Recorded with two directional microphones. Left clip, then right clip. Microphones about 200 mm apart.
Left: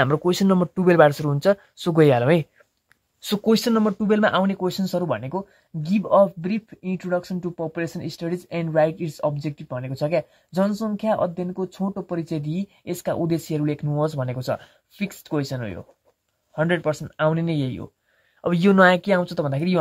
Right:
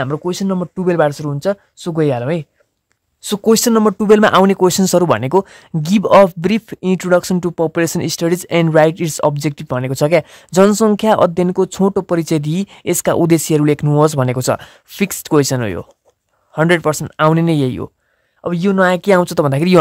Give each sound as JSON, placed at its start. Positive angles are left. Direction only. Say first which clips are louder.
{"t": 0.0, "sound": "speech", "louder": "even", "side_deg": -10}
{"t": 3.4, "sound": "speech", "louder": "right 9 dB", "side_deg": -35}
{"t": 18.4, "sound": "speech", "louder": "right 2 dB", "side_deg": -15}
{"t": 18.9, "sound": "speech", "louder": "right 9 dB", "side_deg": -35}